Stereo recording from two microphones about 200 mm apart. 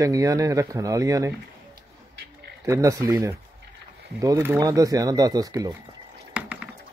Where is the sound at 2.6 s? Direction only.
15° right (ahead or behind).